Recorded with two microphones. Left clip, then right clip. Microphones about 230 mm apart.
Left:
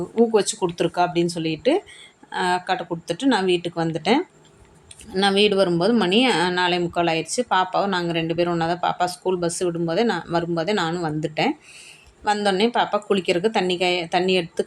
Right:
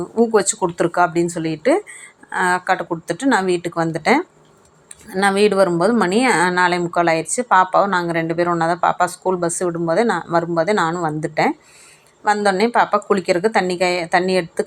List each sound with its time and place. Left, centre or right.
0.3 s a woman's voice: centre
3.4 s speech: right
3.8 s a woman's voice: centre